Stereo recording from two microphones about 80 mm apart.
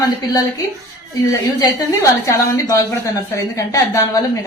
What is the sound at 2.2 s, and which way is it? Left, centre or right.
Speech, left.